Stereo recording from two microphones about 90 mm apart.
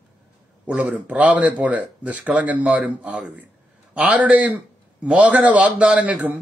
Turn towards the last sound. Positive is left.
turn(degrees=-15)  # may be behind; listen again after turning